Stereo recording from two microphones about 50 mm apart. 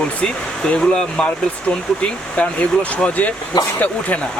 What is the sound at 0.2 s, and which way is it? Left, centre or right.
Speech, centre.